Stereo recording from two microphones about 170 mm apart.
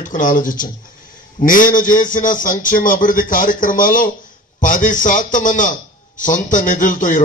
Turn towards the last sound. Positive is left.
turn(degrees=50)  # may be behind; listen again after turning